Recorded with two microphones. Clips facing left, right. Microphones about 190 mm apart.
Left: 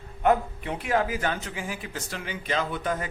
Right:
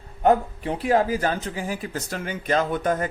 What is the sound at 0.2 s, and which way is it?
A man's voice, 35° right (ahead or behind).